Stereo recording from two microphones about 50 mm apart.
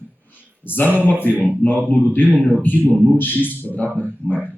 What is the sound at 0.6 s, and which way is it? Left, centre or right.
A man's voice, left.